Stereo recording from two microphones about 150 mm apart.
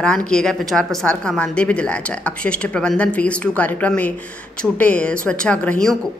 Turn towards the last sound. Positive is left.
turn(degrees=5)  # may be behind; listen again after turning